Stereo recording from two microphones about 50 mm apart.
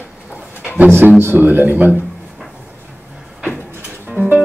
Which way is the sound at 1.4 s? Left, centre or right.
Right.